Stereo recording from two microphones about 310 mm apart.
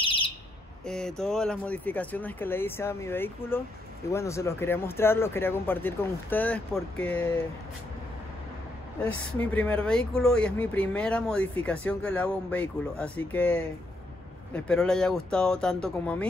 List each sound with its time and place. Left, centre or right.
0.0 s bird: centre
0.8 s speech: centre
9.4 s speech: centre